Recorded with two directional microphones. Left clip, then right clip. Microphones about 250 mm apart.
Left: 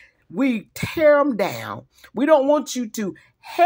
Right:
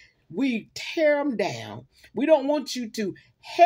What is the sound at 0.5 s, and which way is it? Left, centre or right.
Speech, left.